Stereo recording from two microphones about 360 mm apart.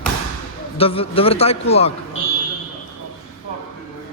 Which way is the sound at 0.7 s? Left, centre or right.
Centre.